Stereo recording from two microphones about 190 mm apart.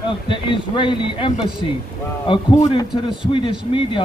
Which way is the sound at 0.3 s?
25° left (ahead or behind).